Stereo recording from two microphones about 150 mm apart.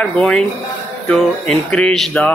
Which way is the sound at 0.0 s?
5° left (ahead or behind).